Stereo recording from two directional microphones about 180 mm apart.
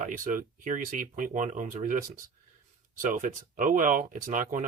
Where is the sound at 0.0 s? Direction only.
45° right (ahead or behind).